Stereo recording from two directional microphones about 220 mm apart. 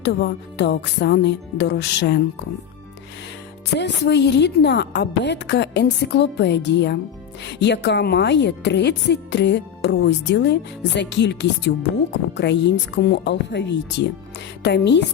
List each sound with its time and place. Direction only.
0.0 s a woman's voice: 50° left (ahead or behind)
3.8 s a woman's voice: 50° left (ahead or behind)